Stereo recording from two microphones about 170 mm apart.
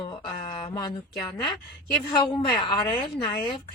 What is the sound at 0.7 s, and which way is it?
Speech, 25° left (ahead or behind).